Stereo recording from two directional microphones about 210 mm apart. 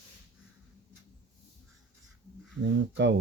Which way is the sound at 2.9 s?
60° right (ahead or behind).